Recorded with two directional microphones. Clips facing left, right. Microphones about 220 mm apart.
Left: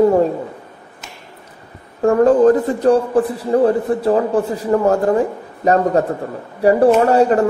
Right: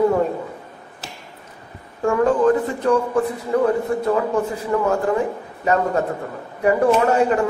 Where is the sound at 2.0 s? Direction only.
40° left (ahead or behind).